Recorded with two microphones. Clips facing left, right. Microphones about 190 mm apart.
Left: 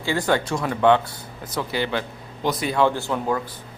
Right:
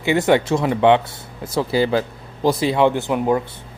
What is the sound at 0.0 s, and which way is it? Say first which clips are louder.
Speech: right 6 dB; 20° right (ahead or behind).